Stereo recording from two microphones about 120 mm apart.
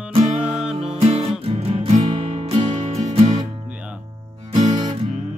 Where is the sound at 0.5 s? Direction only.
5° right (ahead or behind).